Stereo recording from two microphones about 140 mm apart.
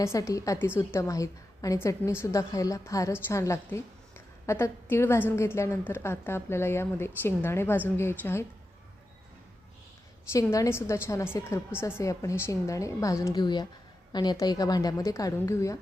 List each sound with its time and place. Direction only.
0.0 s a woman's voice: 20° left (ahead or behind)
10.3 s a woman's voice: 20° left (ahead or behind)